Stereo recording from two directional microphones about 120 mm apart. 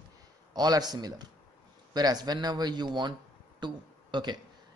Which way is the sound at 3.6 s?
40° right (ahead or behind).